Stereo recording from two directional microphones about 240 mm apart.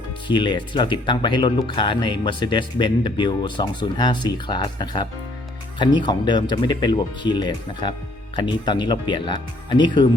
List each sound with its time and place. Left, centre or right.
0.3 s speech: centre